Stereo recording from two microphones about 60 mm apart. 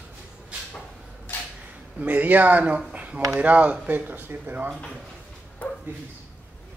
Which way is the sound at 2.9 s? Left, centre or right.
Right.